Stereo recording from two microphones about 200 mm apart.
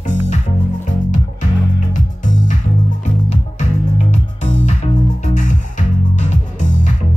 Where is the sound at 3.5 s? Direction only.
35° left (ahead or behind).